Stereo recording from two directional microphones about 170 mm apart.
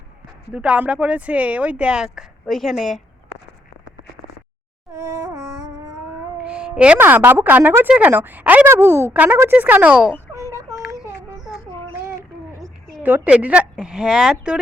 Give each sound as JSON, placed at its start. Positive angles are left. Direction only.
{"t": 0.5, "sound": "a woman's voice", "side_deg": -5}
{"t": 4.9, "sound": "a sound", "side_deg": -20}
{"t": 6.4, "sound": "speech", "side_deg": -5}
{"t": 10.4, "sound": "child singing", "side_deg": -15}
{"t": 12.6, "sound": "a woman's voice", "side_deg": -10}